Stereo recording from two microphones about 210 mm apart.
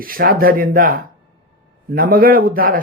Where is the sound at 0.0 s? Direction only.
45° right (ahead or behind).